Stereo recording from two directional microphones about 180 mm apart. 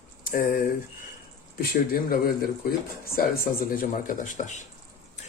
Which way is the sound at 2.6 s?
55° left (ahead or behind).